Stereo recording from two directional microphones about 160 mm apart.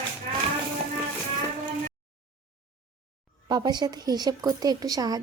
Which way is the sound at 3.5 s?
25° right (ahead or behind).